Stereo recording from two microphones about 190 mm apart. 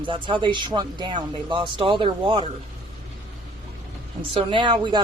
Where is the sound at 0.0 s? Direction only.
25° right (ahead or behind).